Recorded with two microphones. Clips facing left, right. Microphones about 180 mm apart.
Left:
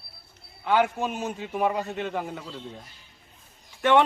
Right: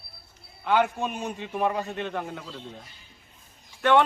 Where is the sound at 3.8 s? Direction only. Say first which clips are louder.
Even; 15° left (ahead or behind).